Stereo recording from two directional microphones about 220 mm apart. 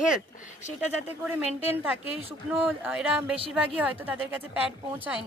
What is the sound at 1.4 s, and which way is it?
Speech, 30° left (ahead or behind).